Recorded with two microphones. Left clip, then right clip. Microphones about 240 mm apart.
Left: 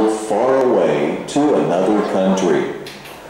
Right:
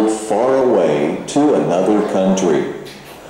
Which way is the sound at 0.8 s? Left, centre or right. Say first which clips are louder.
Right 1 dB; left.